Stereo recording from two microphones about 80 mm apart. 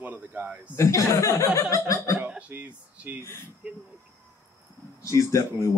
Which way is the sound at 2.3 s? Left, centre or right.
Centre.